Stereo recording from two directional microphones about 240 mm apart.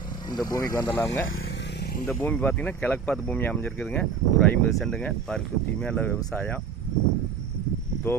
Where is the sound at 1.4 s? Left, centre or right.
Left.